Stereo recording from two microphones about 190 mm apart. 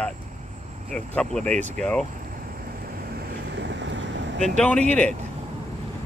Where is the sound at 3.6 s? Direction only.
70° right (ahead or behind).